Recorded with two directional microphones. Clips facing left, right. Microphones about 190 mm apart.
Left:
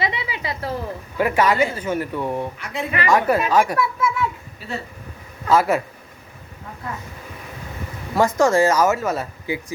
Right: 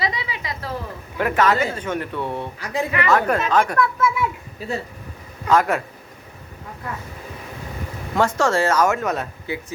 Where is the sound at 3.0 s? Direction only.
10° left (ahead or behind).